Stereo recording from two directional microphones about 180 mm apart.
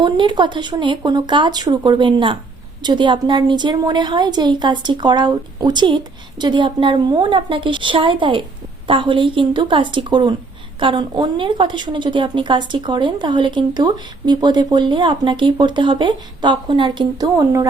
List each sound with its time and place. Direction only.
0.0 s speech: 25° right (ahead or behind)